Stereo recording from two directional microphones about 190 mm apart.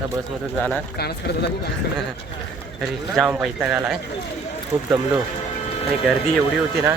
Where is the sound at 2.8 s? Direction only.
Centre (ahead or behind).